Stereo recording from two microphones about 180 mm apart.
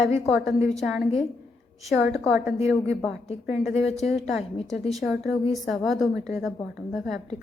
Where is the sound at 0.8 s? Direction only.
Centre (ahead or behind).